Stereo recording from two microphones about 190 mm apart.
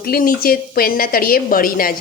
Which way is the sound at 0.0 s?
50° left (ahead or behind).